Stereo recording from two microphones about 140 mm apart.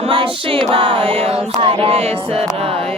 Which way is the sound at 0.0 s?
40° right (ahead or behind).